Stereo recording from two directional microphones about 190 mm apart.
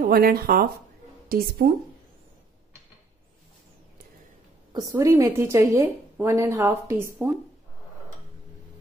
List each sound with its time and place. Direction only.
0.0 s speech: 50° right (ahead or behind)
4.7 s a woman's voice: 15° right (ahead or behind)